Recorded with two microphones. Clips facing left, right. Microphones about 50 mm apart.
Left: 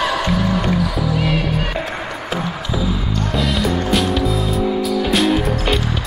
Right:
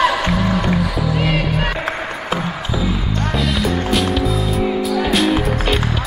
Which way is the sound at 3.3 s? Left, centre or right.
Centre.